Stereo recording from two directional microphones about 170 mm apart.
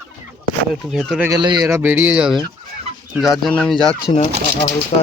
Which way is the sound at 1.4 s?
25° right (ahead or behind).